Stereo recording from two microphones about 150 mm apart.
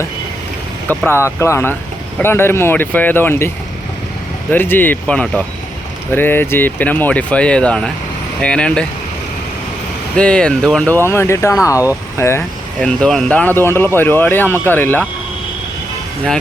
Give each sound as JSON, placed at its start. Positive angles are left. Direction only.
{"t": 0.9, "sound": "speech", "side_deg": 15}
{"t": 4.5, "sound": "speech", "side_deg": 15}
{"t": 10.2, "sound": "speech", "side_deg": 5}
{"t": 10.9, "sound": "speech", "side_deg": 15}
{"t": 12.4, "sound": "speech", "side_deg": 5}